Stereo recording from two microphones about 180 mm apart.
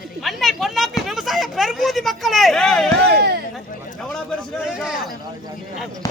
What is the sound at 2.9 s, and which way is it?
Speech, 65° right (ahead or behind).